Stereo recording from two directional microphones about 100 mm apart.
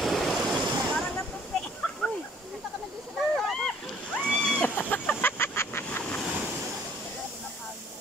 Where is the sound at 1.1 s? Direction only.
5° left (ahead or behind).